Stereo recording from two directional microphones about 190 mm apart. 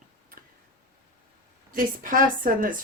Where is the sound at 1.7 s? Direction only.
45° right (ahead or behind).